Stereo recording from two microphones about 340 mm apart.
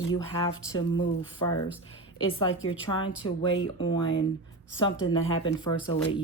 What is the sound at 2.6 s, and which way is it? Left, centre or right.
Speech, centre.